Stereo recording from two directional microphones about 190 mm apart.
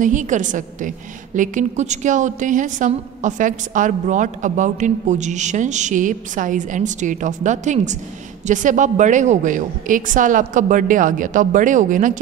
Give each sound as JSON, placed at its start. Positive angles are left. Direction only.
{"t": 0.0, "sound": "a woman's voice", "side_deg": -40}